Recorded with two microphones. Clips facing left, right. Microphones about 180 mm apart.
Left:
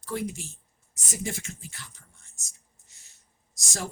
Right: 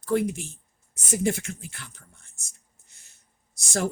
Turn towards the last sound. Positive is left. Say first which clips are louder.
# right 8 dB
turn(degrees=-55)  # may be behind; listen again after turning